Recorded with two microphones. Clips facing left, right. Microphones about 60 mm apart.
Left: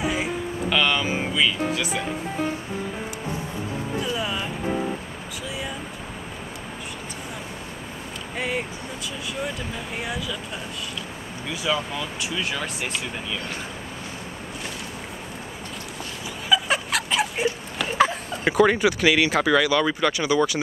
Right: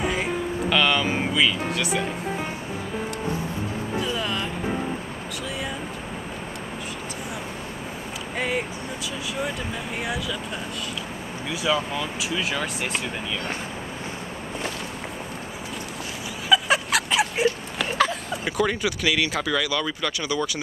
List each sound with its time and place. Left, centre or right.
0.0 s speech: centre
4.0 s music: centre
8.4 s speech: centre
10.0 s speech: centre
11.4 s speech: centre
16.4 s a sound: centre
17.9 s speech: left